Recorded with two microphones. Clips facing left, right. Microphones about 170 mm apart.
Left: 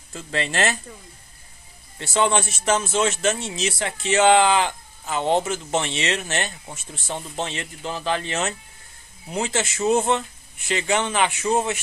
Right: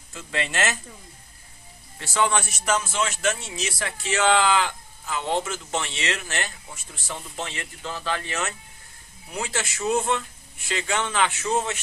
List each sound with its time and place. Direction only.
0.1 s speech: 35° left (ahead or behind)
2.0 s a man's voice: 25° left (ahead or behind)